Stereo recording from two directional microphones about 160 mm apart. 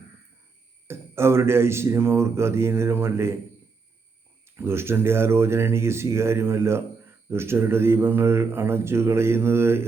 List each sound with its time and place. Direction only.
0.9 s speech: 15° right (ahead or behind)
4.4 s speech: 15° right (ahead or behind)